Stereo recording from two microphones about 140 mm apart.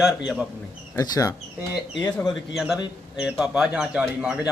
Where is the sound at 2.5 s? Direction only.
Centre (ahead or behind).